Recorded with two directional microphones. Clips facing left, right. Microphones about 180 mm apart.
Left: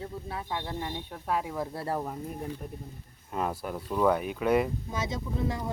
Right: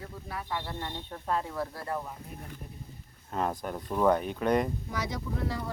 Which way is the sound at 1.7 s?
35° left (ahead or behind).